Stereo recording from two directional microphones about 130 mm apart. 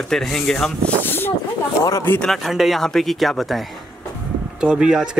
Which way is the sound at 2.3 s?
Centre (ahead or behind).